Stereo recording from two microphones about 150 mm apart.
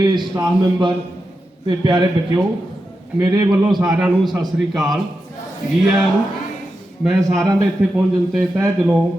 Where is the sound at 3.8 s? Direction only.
5° right (ahead or behind).